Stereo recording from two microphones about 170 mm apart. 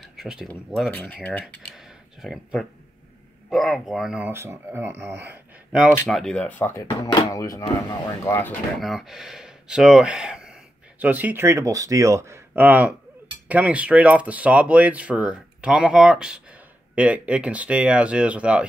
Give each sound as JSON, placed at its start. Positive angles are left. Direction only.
{"t": 0.0, "sound": "a sound", "side_deg": -5}
{"t": 0.5, "sound": "speech", "side_deg": 0}
{"t": 1.4, "sound": "speech", "side_deg": -5}
{"t": 4.3, "sound": "speech", "side_deg": -15}
{"t": 6.0, "sound": "speech", "side_deg": 0}
{"t": 8.7, "sound": "speech", "side_deg": 0}